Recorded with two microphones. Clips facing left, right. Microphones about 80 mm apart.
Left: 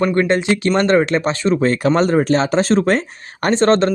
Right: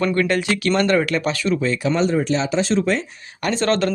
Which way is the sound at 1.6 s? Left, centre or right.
Left.